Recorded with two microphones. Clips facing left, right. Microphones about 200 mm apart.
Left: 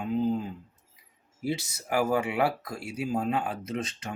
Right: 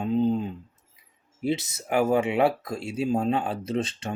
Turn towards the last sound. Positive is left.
turn(degrees=-30)  # may be behind; listen again after turning